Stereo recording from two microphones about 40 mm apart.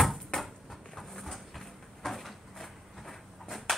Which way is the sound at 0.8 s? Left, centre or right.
Centre.